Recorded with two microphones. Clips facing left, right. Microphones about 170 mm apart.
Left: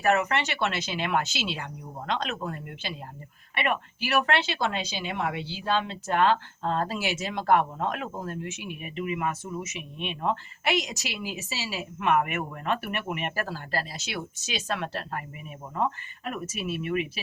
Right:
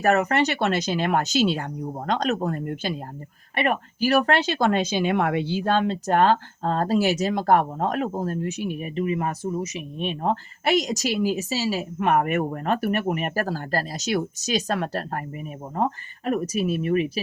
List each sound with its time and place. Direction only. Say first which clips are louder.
0.0 s speech: right 5 dB; 40° right (ahead or behind)